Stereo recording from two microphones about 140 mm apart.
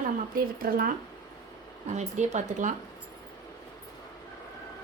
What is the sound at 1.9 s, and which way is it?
Speech, 55° right (ahead or behind).